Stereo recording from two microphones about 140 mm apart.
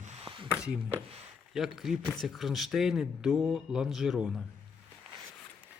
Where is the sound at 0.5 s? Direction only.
5° right (ahead or behind).